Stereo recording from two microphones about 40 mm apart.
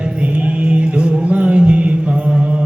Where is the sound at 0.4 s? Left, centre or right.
Right.